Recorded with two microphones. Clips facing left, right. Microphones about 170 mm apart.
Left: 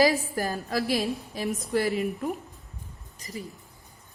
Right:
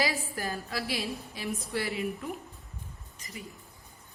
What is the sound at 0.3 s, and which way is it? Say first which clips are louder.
A woman's voice: left 6 dB; 40° left (ahead or behind).